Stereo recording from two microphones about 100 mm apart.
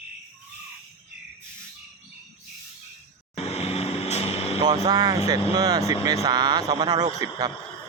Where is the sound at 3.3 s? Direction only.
90° left.